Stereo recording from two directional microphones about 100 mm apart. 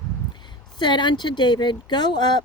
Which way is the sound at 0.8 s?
50° left (ahead or behind).